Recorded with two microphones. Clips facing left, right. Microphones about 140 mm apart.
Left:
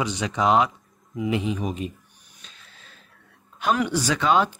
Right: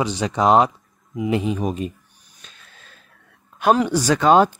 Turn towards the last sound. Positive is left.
turn(degrees=-45)  # may be behind; listen again after turning